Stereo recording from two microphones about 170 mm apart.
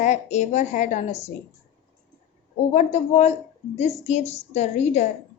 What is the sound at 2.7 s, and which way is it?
Speech, 40° left (ahead or behind).